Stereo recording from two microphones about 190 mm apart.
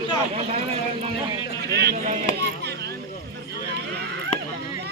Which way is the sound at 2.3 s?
60° right (ahead or behind).